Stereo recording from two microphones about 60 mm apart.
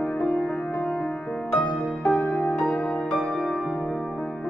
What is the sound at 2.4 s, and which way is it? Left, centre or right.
Music, centre.